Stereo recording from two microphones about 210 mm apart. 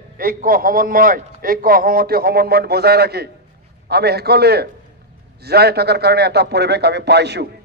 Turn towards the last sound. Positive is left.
turn(degrees=-50)  # may be behind; listen again after turning